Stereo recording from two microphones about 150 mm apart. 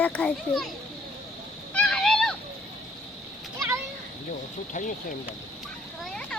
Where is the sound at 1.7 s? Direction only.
5° left (ahead or behind).